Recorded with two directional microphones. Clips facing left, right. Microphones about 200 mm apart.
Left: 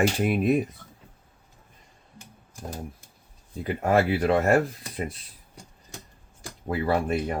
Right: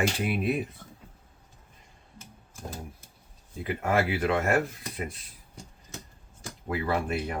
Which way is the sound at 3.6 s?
35° left (ahead or behind).